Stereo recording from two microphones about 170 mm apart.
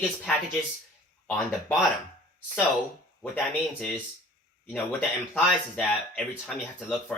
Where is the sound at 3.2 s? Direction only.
5° left (ahead or behind).